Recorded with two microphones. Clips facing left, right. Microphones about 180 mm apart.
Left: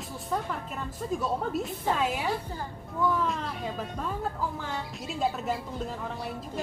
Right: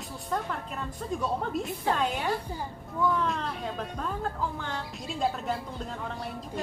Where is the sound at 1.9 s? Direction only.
5° left (ahead or behind).